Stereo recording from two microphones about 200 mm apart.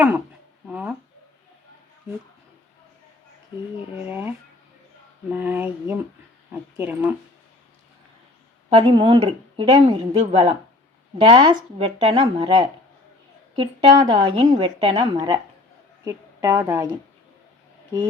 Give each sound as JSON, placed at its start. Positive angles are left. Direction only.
{"t": 0.7, "sound": "a sound", "side_deg": -5}
{"t": 3.9, "sound": "speech", "side_deg": -10}
{"t": 8.8, "sound": "a woman's voice", "side_deg": -25}